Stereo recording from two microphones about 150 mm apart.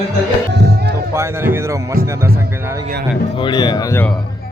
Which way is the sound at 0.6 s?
90° right.